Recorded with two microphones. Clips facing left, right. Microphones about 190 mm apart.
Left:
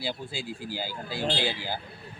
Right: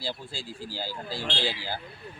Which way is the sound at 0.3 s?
55° left (ahead or behind).